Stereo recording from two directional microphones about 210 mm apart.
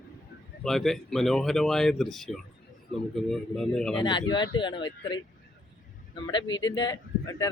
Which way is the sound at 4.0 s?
20° left (ahead or behind).